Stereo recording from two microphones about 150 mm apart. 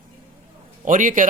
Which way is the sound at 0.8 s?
60° right (ahead or behind).